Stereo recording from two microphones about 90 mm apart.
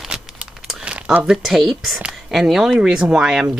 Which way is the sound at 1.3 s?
Centre (ahead or behind).